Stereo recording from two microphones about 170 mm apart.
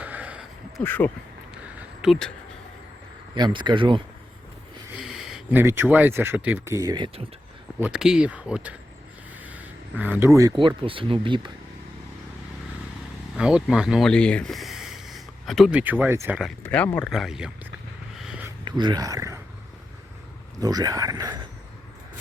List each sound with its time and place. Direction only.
0.0 s a sound: 10° right (ahead or behind)
0.8 s speech: 10° left (ahead or behind)
2.0 s speech: centre (ahead or behind)
3.3 s speech: 25° right (ahead or behind)
5.0 s speech: centre (ahead or behind); by 7.3 s 25° right (ahead or behind)
7.9 s speech: 5° right (ahead or behind)
10.0 s speech: 10° right (ahead or behind); by 11.5 s 30° right (ahead or behind)
13.3 s speech: 5° right (ahead or behind)
16.6 s speech: 10° left (ahead or behind)
17.1 s speech: 5° right (ahead or behind)
18.2 s a sound: 5° right (ahead or behind)
18.6 s speech: 25° right (ahead or behind)
20.6 s speech: 20° right (ahead or behind)